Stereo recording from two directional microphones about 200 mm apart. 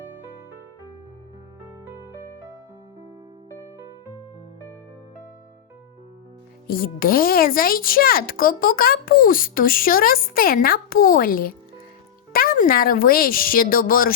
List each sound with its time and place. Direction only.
6.7 s a child's voice: 45° left (ahead or behind)